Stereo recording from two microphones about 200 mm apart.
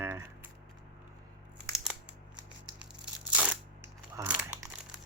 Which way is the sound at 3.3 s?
5° right (ahead or behind).